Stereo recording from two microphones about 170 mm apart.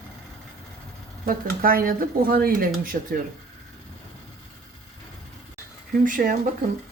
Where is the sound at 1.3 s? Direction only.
60° right (ahead or behind).